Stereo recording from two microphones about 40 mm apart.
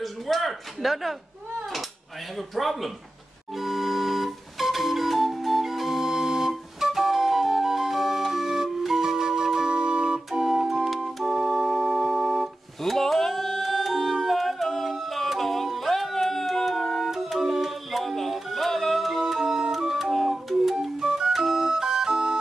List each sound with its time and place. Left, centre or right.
0.0 s speech: centre
2.3 s a man's voice: centre
3.5 s music: centre; by 10.4 s right
10.8 s organ: centre
12.8 s yodeling: centre
17.0 s music: centre
19.7 s organ: centre
21.3 s music: centre